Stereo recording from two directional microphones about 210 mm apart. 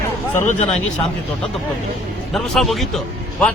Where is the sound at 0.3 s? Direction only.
30° left (ahead or behind).